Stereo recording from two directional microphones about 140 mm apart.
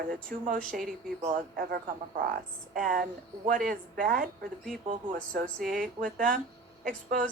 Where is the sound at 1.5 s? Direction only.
90° right.